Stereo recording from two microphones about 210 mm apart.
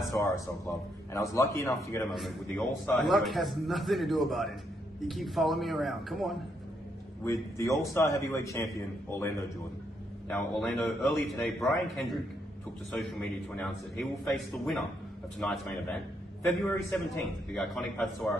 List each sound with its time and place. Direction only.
0.1 s a man's voice: 15° left (ahead or behind)
2.0 s a man's voice: centre (ahead or behind)
7.2 s a man's voice: 15° left (ahead or behind)
10.2 s a man's voice: 5° left (ahead or behind)